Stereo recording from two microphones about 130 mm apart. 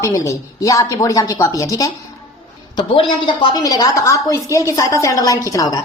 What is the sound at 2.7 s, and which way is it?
Speech, 40° left (ahead or behind).